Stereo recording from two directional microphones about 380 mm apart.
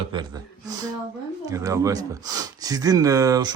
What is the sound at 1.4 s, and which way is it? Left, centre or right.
Speech, centre.